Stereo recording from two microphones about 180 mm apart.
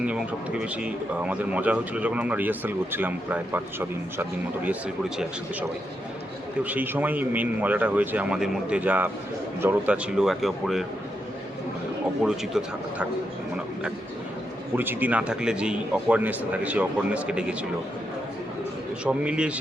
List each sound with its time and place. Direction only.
0.0 s speech: 5° right (ahead or behind)
12.2 s speech: 5° right (ahead or behind)
14.8 s speech: 10° right (ahead or behind)
19.0 s speech: 5° right (ahead or behind)